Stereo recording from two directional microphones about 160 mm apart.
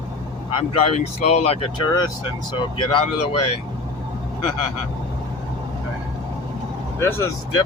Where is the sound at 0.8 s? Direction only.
40° left (ahead or behind).